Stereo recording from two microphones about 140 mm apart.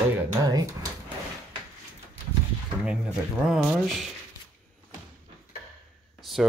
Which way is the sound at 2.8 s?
5° right (ahead or behind).